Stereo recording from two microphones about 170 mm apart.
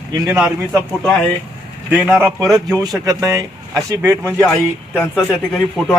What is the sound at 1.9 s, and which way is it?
A man's voice, 15° right (ahead or behind).